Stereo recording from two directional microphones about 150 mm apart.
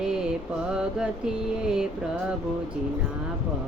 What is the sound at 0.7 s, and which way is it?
Mantra, 5° right (ahead or behind).